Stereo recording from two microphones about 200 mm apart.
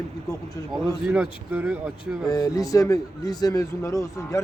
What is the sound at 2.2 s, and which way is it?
A man's voice, 20° left (ahead or behind).